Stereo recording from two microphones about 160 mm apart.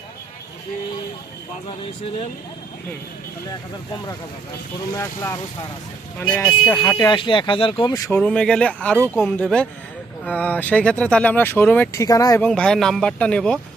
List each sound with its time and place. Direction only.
4.9 s speech: 20° left (ahead or behind)
6.7 s speech: 25° left (ahead or behind)
8.1 s speech: 5° left (ahead or behind)
12.0 s speech: 20° left (ahead or behind)
12.5 s speech: 5° left (ahead or behind)